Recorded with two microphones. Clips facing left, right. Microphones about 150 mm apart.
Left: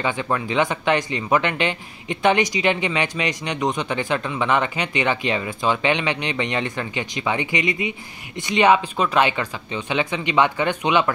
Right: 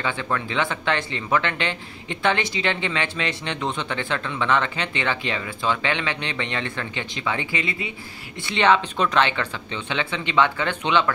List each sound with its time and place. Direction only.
0.0 s speech: 15° left (ahead or behind)